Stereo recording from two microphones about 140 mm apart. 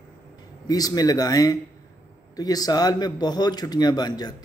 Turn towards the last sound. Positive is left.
turn(degrees=30)  # may be behind; listen again after turning